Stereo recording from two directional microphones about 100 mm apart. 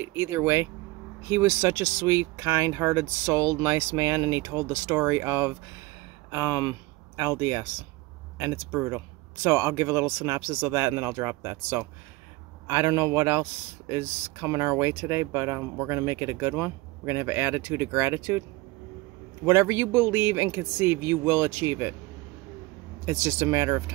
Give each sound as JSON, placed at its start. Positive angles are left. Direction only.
{"t": 0.1, "sound": "speech", "side_deg": -25}
{"t": 8.7, "sound": "speech", "side_deg": -25}
{"t": 19.4, "sound": "speech", "side_deg": -25}
{"t": 23.0, "sound": "speech", "side_deg": -25}